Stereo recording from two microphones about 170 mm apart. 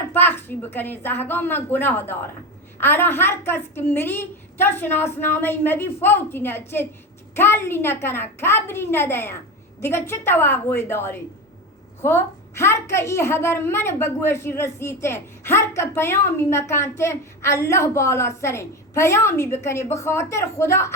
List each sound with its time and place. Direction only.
0.1 s a woman's voice: 10° left (ahead or behind)